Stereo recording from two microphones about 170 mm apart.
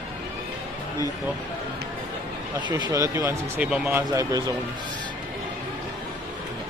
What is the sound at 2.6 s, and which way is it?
Speech, 25° right (ahead or behind).